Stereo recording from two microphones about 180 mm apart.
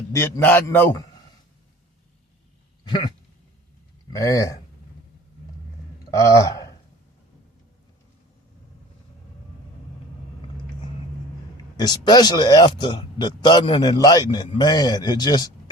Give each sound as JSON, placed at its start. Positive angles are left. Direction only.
{"t": 0.1, "sound": "a man's voice", "side_deg": 15}
{"t": 2.8, "sound": "a sound", "side_deg": 25}
{"t": 4.1, "sound": "a man's voice", "side_deg": 20}
{"t": 6.1, "sound": "a man's voice", "side_deg": 15}
{"t": 11.8, "sound": "speech", "side_deg": 25}